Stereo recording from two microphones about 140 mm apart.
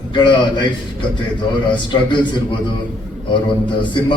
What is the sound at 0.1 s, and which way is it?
Speech, 35° left (ahead or behind).